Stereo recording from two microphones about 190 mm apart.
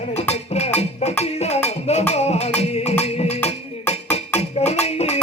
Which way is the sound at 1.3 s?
35° left (ahead or behind).